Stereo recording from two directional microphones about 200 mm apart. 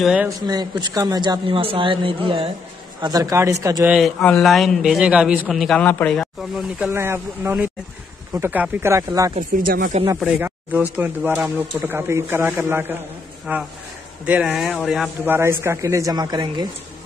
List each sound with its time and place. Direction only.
0.0 s a man's voice: 5° right (ahead or behind)
0.5 s speech: 20° right (ahead or behind)
3.9 s a man's voice: centre (ahead or behind)
6.9 s speech: 10° right (ahead or behind)
9.6 s speech: 45° right (ahead or behind)
10.2 s speech: 10° right (ahead or behind)